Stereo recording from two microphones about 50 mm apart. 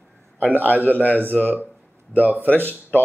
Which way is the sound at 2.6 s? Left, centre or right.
Left.